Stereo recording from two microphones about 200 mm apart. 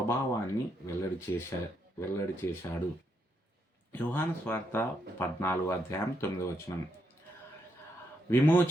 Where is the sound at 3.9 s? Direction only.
10° left (ahead or behind).